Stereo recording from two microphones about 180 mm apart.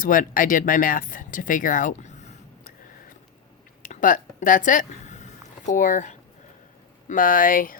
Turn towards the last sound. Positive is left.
turn(degrees=50)  # may be behind; listen again after turning